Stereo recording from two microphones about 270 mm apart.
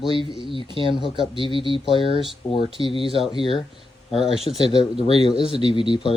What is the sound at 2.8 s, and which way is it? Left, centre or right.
Speech, centre.